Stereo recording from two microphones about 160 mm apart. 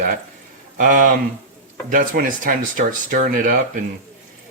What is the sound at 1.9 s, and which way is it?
Speech, 60° right (ahead or behind).